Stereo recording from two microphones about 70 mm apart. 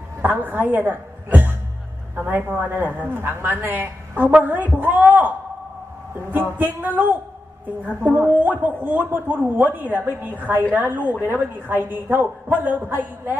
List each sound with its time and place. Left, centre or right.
0.2 s music: right
2.5 s a woman's voice: right
6.3 s a woman's voice: right